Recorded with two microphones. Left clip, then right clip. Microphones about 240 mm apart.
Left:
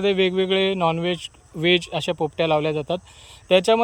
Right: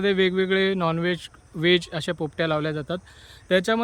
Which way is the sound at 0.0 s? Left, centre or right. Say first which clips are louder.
Left 2 dB; centre.